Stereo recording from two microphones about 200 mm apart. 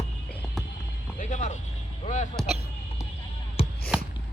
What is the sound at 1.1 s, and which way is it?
Speech, 40° left (ahead or behind).